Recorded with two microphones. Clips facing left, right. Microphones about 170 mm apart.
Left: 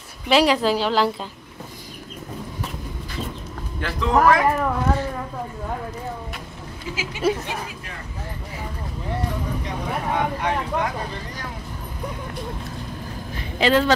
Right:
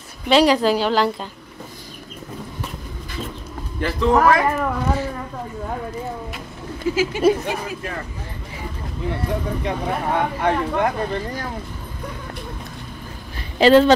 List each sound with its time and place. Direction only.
0.3 s speech: 5° left (ahead or behind)
3.8 s speech: centre (ahead or behind)
7.2 s speech: 15° right (ahead or behind)
9.7 s speech: 55° right (ahead or behind)
13.6 s speech: 35° right (ahead or behind)